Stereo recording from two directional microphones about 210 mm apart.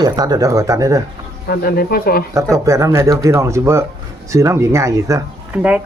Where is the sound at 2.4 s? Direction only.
15° right (ahead or behind).